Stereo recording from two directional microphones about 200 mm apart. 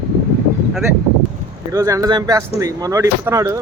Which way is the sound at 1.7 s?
15° right (ahead or behind).